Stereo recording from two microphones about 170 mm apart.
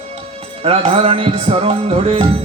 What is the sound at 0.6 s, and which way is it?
Music, 35° right (ahead or behind).